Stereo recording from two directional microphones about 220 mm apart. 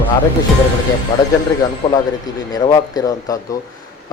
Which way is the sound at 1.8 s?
25° left (ahead or behind).